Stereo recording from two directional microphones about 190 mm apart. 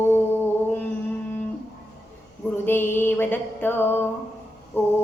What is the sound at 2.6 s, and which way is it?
A woman's voice, 10° left (ahead or behind).